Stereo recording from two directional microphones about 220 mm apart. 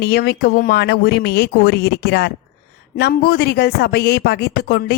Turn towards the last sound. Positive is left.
turn(degrees=45)  # may be behind; listen again after turning